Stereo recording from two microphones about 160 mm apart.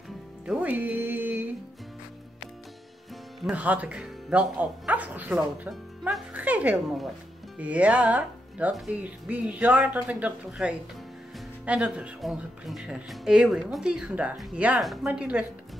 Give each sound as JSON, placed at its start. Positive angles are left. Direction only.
{"t": 0.5, "sound": "music", "side_deg": -10}
{"t": 3.4, "sound": "speech", "side_deg": -10}